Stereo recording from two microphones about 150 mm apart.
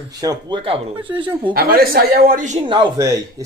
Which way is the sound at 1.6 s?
85° right.